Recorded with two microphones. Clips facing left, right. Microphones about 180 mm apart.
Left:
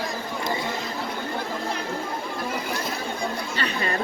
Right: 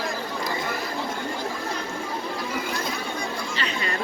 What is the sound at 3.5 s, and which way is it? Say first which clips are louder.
Chatter: left 2 dB; 55° left (ahead or behind).